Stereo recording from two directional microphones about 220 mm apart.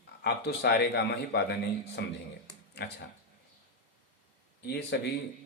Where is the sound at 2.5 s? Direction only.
50° left (ahead or behind).